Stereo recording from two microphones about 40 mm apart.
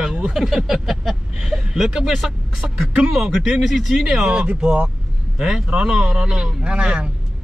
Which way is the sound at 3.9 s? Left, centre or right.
Centre.